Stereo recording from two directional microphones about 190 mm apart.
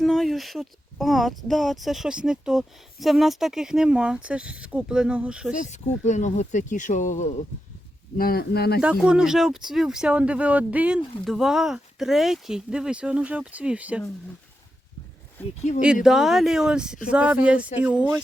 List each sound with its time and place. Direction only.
0.0 s speech: centre (ahead or behind)
5.5 s speech: 40° left (ahead or behind)
8.2 s speech: 55° left (ahead or behind)
8.8 s speech: 5° right (ahead or behind)
16.0 s speech: centre (ahead or behind)